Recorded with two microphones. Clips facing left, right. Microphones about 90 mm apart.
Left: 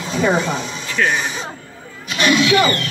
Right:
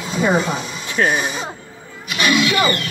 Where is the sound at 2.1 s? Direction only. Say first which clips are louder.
Left 2 dB; 10° right (ahead or behind).